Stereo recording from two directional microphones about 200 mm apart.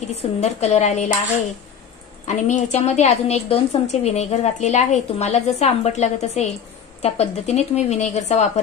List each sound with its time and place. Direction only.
0.1 s a woman's voice: 30° left (ahead or behind)
2.2 s a woman's voice: 35° left (ahead or behind)